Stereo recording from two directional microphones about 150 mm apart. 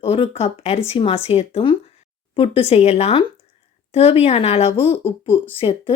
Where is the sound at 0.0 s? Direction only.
40° left (ahead or behind).